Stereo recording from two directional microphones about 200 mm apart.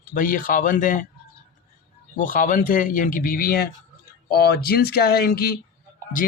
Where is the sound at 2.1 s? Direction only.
40° left (ahead or behind).